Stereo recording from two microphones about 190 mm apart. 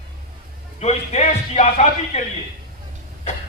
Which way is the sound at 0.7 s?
35° left (ahead or behind).